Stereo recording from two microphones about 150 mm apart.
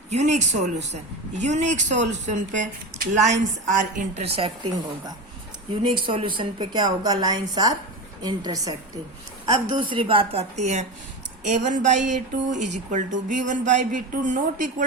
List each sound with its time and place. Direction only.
0.1 s a woman's voice: 50° right (ahead or behind); by 8.7 s 25° right (ahead or behind)
9.5 s a woman's voice: 35° right (ahead or behind); by 14.8 s 60° right (ahead or behind)